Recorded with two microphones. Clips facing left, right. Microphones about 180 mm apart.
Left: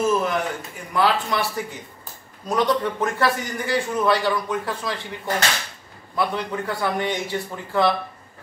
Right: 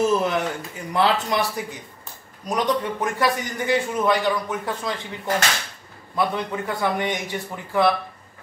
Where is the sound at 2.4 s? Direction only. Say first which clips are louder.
Left 2 dB; 15° right (ahead or behind).